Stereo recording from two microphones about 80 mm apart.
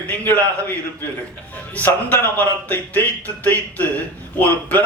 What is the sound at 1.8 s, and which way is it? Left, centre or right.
A man's voice, left.